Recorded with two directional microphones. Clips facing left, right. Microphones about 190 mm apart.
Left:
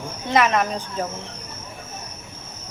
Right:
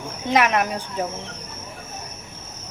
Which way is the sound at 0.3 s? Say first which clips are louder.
Even; 10° right (ahead or behind).